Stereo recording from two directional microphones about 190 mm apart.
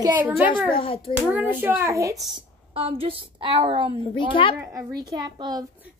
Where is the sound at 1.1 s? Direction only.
10° right (ahead or behind).